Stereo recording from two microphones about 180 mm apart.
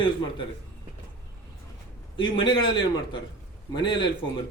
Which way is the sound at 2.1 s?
25° left (ahead or behind).